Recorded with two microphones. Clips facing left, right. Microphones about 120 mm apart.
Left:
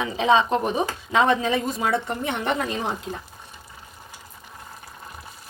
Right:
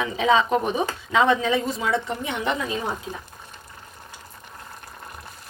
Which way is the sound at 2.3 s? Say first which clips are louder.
Left 1 dB; 55° left (ahead or behind).